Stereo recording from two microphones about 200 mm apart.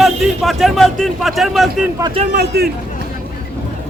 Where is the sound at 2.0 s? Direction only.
30° right (ahead or behind).